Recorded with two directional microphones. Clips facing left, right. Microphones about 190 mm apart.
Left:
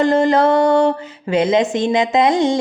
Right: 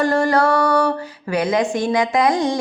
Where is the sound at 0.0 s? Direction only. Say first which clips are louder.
Left 3 dB; 20° left (ahead or behind).